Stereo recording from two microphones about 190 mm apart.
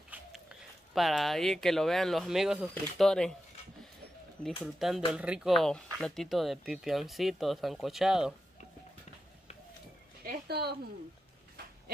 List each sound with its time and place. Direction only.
0.1 s speech: 5° right (ahead or behind)
4.7 s speech: centre (ahead or behind)
10.2 s a sound: 55° right (ahead or behind)